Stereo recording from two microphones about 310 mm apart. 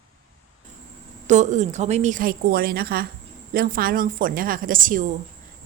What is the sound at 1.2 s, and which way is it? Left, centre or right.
A woman's voice, right.